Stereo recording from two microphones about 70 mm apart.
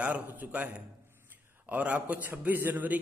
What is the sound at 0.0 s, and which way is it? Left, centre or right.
A man's voice, right.